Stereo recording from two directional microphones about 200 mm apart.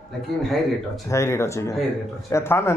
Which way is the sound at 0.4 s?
Centre (ahead or behind).